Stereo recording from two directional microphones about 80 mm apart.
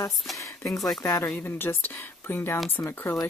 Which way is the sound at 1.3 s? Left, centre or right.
Left.